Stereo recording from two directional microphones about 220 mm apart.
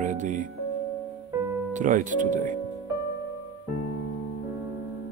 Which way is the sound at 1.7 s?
35° right (ahead or behind).